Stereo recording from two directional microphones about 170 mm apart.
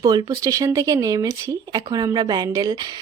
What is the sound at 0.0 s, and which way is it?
Speech, 25° right (ahead or behind).